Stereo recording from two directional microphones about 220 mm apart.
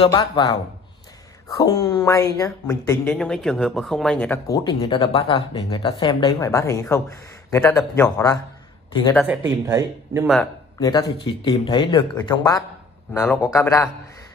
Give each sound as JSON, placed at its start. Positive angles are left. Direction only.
{"t": 0.0, "sound": "speech", "side_deg": 15}
{"t": 1.6, "sound": "speech", "side_deg": 15}
{"t": 2.9, "sound": "speech", "side_deg": 5}
{"t": 9.5, "sound": "speech", "side_deg": -10}
{"t": 10.2, "sound": "a man's voice", "side_deg": 0}
{"t": 10.8, "sound": "speech", "side_deg": 20}